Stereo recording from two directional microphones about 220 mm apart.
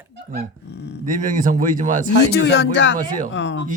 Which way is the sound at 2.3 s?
50° left (ahead or behind).